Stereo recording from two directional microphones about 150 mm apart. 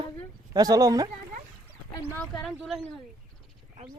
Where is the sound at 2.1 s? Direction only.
5° left (ahead or behind).